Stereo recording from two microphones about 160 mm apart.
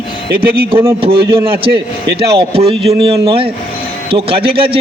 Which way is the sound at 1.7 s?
90° right.